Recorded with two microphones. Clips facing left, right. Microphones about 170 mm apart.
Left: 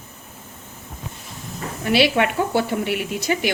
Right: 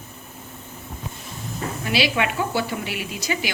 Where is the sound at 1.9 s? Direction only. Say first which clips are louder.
Left 5 dB; 55° left (ahead or behind).